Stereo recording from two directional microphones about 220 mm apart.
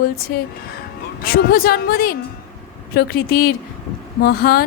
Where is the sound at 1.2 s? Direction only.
45° left (ahead or behind).